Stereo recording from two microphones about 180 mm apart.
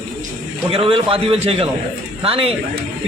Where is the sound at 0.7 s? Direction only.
30° right (ahead or behind).